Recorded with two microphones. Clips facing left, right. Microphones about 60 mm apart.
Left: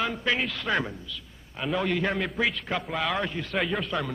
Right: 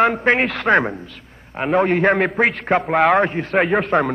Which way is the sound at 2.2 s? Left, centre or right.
Right.